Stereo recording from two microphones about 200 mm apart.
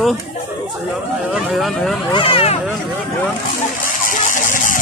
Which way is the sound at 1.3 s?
Centre (ahead or behind).